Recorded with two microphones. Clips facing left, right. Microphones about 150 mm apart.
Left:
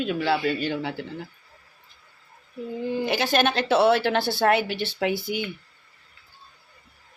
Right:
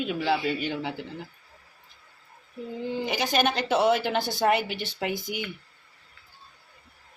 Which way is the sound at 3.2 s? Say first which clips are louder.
Left 1 dB; 10° right (ahead or behind).